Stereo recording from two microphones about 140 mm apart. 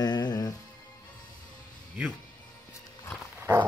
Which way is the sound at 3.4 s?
15° right (ahead or behind).